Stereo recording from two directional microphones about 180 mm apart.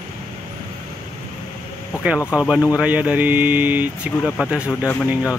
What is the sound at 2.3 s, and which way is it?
Speech, 5° right (ahead or behind).